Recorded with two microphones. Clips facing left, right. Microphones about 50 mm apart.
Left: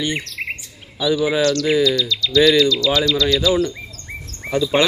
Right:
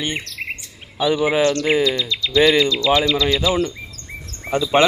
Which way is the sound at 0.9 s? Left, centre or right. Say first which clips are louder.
Right 1 dB; right.